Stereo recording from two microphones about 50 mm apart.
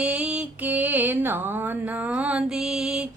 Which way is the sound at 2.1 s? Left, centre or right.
Right.